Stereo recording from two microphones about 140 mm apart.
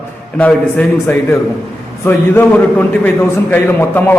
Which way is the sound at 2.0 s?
15° left (ahead or behind).